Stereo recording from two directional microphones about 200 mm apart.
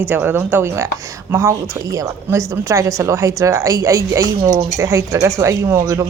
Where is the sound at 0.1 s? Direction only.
10° right (ahead or behind).